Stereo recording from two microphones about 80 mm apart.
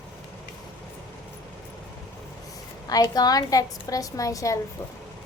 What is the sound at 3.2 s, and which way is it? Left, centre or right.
A woman's voice, left.